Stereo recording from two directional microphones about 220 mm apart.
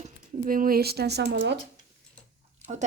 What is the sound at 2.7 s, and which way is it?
Speech, 30° right (ahead or behind).